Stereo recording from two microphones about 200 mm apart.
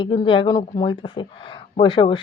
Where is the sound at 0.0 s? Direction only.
25° left (ahead or behind).